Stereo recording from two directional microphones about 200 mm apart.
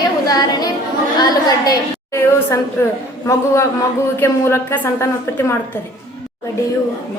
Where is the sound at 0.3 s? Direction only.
20° left (ahead or behind).